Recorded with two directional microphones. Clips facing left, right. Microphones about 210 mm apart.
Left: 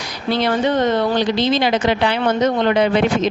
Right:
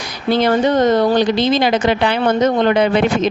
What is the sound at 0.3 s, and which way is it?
A woman's voice, 45° right (ahead or behind).